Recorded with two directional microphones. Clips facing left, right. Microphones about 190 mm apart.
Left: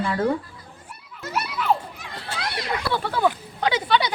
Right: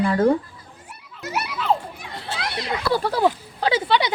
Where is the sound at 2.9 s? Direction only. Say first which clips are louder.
Right 3 dB; 40° right (ahead or behind).